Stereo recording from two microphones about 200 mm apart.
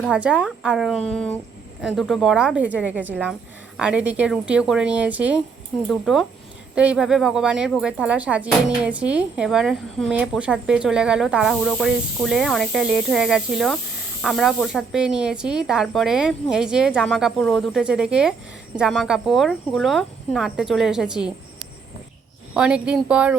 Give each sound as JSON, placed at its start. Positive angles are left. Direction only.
{"t": 0.0, "sound": "speech", "side_deg": -5}
{"t": 22.5, "sound": "speech", "side_deg": -5}